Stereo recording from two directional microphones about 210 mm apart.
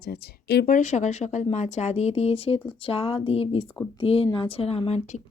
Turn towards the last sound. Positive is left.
turn(degrees=30)  # may be behind; listen again after turning